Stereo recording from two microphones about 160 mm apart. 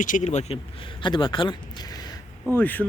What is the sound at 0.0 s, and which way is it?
Speech, 50° left (ahead or behind).